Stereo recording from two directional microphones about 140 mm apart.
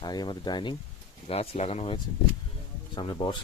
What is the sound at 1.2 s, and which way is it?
Speech, 45° left (ahead or behind).